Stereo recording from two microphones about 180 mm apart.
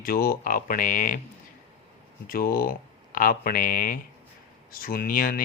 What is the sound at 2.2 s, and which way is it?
Speech, 55° left (ahead or behind).